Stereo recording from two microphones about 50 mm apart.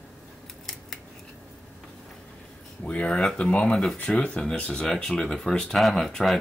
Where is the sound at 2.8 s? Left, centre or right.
Left.